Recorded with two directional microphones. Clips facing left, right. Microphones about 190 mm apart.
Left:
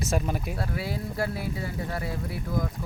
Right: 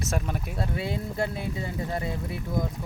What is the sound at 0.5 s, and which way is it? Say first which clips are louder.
Speech: right 1 dB; 25° right (ahead or behind).